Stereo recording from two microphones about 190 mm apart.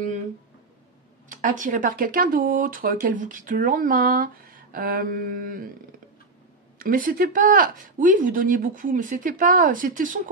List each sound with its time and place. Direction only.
1.3 s speech: 45° right (ahead or behind)